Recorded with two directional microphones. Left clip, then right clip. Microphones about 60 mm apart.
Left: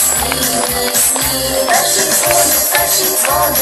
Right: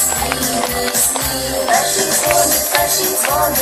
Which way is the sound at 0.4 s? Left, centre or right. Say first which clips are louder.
Left 2 dB; left.